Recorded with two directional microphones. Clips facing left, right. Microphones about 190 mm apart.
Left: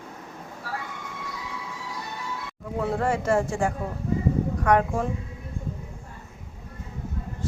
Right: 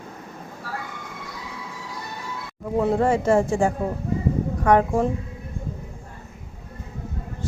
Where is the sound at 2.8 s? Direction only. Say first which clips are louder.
Right 5 dB; 25° right (ahead or behind).